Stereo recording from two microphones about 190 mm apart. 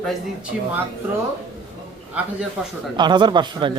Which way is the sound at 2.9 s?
25° right (ahead or behind).